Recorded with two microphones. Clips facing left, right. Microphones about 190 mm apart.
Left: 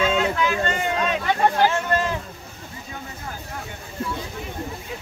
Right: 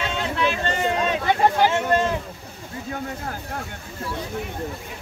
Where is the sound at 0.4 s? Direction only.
30° right (ahead or behind).